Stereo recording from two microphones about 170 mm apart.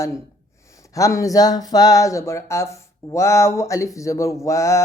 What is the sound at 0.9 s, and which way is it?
Speech, 20° left (ahead or behind).